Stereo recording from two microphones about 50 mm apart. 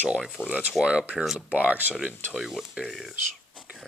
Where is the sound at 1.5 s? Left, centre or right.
Right.